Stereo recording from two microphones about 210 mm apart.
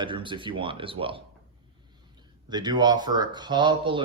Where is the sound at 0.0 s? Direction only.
25° right (ahead or behind).